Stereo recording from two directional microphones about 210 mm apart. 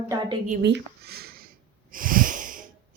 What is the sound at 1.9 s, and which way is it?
Wheeze, 40° right (ahead or behind).